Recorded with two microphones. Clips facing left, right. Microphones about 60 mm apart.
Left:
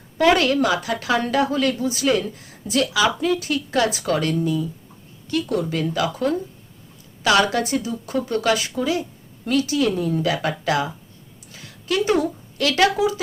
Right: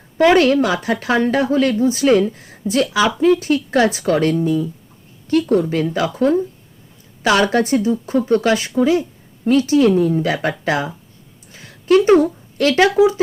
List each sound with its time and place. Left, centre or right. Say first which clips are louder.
0.3 s a woman's voice: right 5 dB; right